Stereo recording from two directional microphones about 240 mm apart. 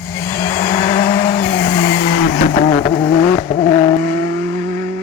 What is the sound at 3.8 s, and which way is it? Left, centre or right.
Vehicle, centre.